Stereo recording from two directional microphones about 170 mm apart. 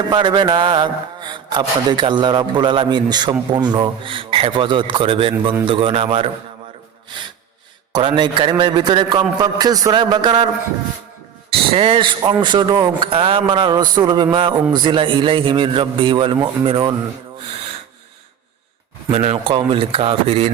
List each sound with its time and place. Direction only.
0.1 s a man's voice: 25° right (ahead or behind)
7.9 s a man's voice: 25° right (ahead or behind)
11.5 s a man's voice: 35° right (ahead or behind)
19.1 s speech: 35° right (ahead or behind)